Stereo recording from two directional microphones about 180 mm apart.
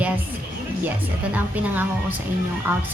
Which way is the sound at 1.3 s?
10° right (ahead or behind).